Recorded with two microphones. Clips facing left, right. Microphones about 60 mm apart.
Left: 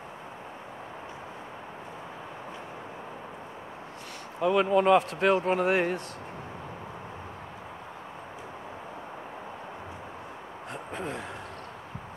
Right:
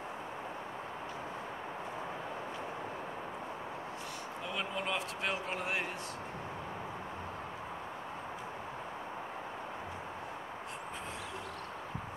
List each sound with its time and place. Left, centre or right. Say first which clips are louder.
4.4 s speech: left 16 dB; left